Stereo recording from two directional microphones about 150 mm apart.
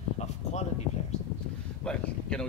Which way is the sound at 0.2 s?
45° left (ahead or behind).